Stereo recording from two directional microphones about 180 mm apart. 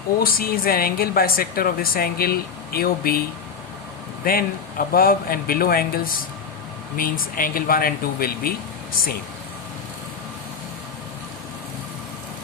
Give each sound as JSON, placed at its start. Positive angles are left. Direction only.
{"t": 0.2, "sound": "a woman's voice", "side_deg": 55}
{"t": 4.2, "sound": "a woman's voice", "side_deg": 55}